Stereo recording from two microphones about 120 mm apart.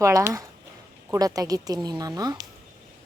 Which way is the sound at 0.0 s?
25° right (ahead or behind).